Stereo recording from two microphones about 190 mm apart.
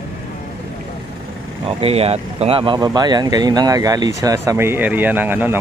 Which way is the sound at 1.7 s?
30° right (ahead or behind).